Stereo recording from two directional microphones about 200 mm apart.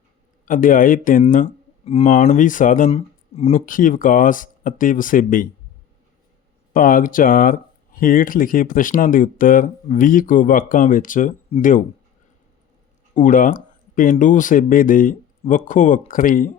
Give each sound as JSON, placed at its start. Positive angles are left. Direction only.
{"t": 0.4, "sound": "speech", "side_deg": 40}
{"t": 6.7, "sound": "speech", "side_deg": 45}
{"t": 13.1, "sound": "speech", "side_deg": 40}